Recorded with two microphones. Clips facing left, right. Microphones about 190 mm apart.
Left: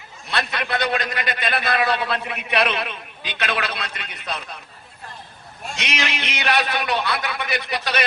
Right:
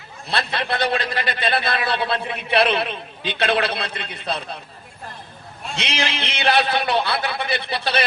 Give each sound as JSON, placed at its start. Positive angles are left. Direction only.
{"t": 0.3, "sound": "a man's voice", "side_deg": -30}
{"t": 5.8, "sound": "a man's voice", "side_deg": -30}